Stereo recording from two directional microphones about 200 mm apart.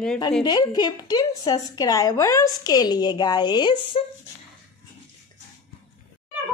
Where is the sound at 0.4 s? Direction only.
20° left (ahead or behind).